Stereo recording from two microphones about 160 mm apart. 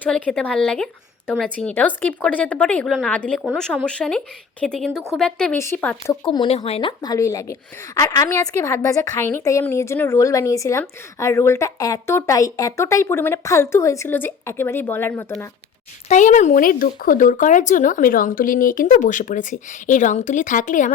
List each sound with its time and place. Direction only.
0.0 s a woman's voice: 5° left (ahead or behind)
6.2 s a woman's voice: 30° left (ahead or behind); by 15.4 s 15° left (ahead or behind)
16.0 s speech: 50° left (ahead or behind)